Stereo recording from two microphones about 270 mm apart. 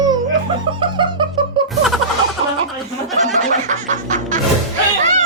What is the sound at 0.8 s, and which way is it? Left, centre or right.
Music, centre.